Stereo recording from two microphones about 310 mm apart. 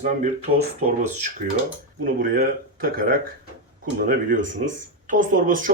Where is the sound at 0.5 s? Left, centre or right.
Right.